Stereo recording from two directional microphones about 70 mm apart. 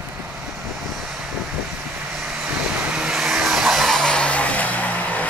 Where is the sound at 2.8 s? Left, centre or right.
Centre.